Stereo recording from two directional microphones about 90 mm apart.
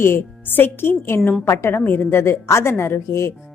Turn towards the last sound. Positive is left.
turn(degrees=30)  # may be behind; listen again after turning